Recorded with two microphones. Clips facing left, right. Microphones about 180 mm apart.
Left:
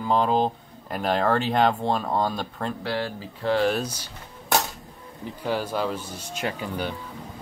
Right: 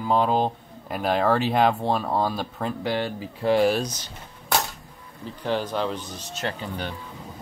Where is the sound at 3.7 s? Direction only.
10° left (ahead or behind).